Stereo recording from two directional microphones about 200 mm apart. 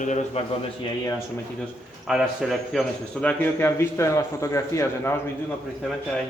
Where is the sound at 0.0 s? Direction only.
35° left (ahead or behind).